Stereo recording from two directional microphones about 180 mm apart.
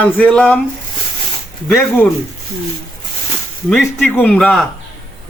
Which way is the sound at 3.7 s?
10° left (ahead or behind).